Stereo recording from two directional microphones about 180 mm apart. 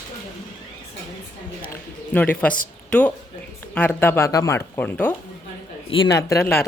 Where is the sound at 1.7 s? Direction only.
10° left (ahead or behind).